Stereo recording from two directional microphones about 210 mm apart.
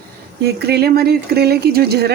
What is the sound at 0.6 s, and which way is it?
A woman's voice, 50° right (ahead or behind).